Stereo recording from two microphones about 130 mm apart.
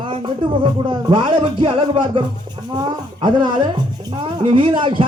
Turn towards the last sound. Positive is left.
turn(degrees=-40)  # may be behind; listen again after turning